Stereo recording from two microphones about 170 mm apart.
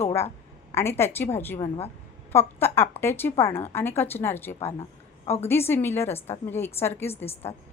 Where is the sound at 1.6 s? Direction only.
35° left (ahead or behind).